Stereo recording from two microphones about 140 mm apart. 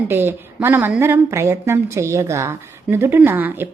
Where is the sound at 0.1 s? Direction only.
15° right (ahead or behind).